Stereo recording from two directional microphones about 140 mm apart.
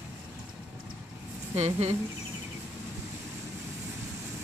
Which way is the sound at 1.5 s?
50° right (ahead or behind).